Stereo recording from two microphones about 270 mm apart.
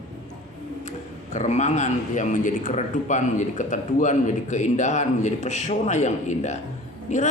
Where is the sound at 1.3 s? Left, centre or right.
Left.